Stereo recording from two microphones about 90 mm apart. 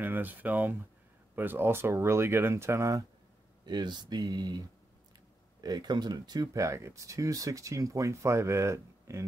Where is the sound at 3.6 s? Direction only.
50° right (ahead or behind).